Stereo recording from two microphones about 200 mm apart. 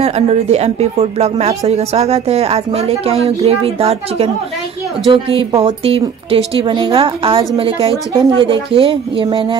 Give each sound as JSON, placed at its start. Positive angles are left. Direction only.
{"t": 0.0, "sound": "speech", "side_deg": -30}